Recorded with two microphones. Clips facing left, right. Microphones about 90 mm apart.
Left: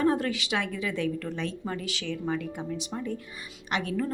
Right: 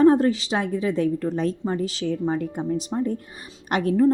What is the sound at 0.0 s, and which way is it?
A woman's voice, 35° right (ahead or behind).